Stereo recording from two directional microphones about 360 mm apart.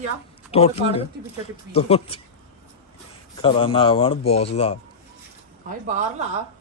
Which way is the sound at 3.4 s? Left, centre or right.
Centre.